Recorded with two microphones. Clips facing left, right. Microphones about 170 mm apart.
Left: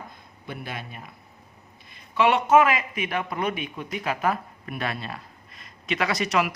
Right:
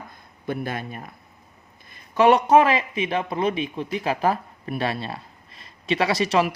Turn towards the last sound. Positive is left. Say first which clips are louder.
# right 4 dB
turn(degrees=-30)  # may be behind; listen again after turning